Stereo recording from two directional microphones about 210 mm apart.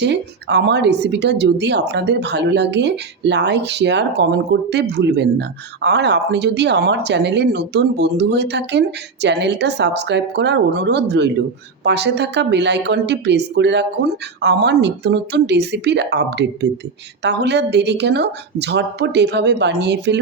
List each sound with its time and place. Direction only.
0.0 s speech: 55° right (ahead or behind)